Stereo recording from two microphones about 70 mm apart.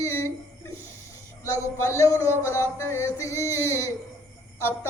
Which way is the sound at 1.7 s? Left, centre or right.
Left.